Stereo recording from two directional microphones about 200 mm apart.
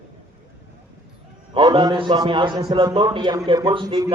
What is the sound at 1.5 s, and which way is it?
A man's voice, 20° right (ahead or behind).